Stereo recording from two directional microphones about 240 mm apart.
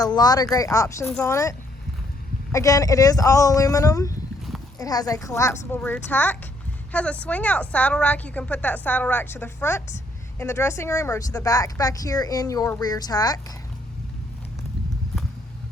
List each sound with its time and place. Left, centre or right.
0.0 s a woman's voice: centre